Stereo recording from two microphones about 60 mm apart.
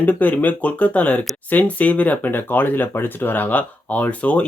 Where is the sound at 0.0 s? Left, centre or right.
Left.